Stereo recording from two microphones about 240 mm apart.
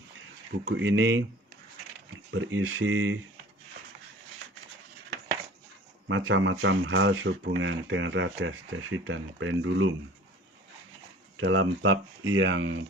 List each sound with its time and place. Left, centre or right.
0.7 s speech: right
2.3 s speech: right
6.1 s speech: right
11.3 s speech: right